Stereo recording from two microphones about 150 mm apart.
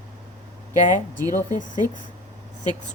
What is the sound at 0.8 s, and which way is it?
Speech, 60° left (ahead or behind).